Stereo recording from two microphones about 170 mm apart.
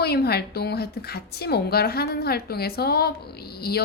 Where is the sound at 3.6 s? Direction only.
65° left (ahead or behind).